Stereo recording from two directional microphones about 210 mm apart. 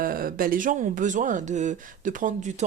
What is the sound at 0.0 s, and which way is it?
Speech, 45° right (ahead or behind).